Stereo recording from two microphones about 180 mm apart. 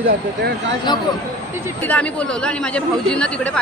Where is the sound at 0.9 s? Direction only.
25° left (ahead or behind).